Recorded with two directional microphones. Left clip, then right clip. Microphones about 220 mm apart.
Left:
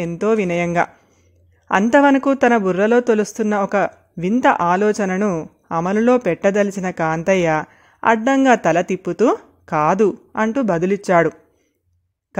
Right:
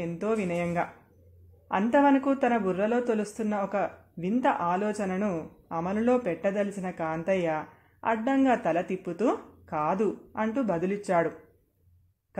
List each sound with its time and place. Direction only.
0.0 s speech: 45° left (ahead or behind)